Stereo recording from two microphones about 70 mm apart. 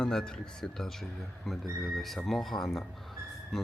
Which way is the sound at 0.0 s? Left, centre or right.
Centre.